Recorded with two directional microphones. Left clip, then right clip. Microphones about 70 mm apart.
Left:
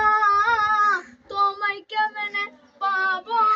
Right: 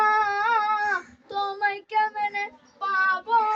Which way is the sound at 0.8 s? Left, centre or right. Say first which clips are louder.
Left 5 dB; right.